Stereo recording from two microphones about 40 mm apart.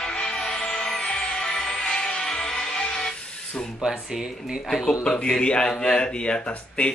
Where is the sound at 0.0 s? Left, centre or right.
Left.